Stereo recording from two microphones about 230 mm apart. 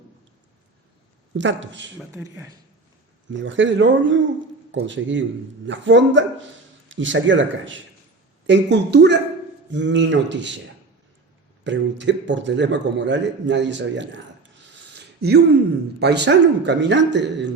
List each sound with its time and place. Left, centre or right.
1.4 s a man's voice: right
2.1 s speech: centre
3.3 s a man's voice: right
11.6 s a man's voice: right
14.9 s a sound: right
16.0 s a man's voice: right